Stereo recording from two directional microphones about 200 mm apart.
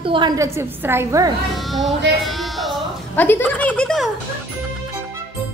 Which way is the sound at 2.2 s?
Centre (ahead or behind).